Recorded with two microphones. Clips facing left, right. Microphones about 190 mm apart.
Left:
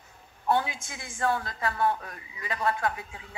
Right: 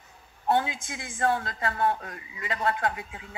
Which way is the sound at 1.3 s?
25° right (ahead or behind).